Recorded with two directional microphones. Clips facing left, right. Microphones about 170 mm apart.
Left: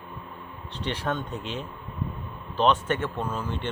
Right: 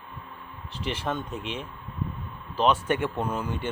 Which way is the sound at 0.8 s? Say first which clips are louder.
Left 1 dB; 5° right (ahead or behind).